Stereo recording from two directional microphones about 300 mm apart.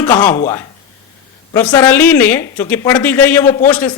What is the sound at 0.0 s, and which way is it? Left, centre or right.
Speech, centre.